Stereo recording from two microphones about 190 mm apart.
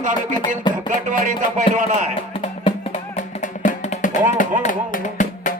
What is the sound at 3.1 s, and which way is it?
Music, 40° left (ahead or behind).